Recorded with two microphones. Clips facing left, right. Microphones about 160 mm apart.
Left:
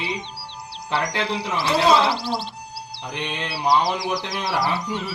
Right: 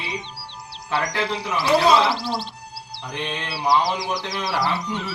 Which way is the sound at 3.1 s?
20° left (ahead or behind).